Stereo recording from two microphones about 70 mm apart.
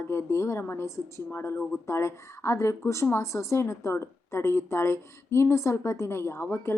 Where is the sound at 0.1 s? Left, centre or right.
Left.